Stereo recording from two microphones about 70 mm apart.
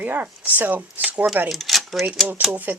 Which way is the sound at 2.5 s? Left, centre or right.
Right.